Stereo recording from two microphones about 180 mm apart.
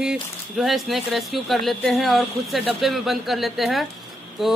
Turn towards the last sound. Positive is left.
turn(degrees=0)  # may be behind; listen again after turning